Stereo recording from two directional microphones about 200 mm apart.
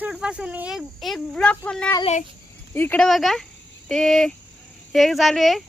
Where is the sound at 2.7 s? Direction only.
10° left (ahead or behind).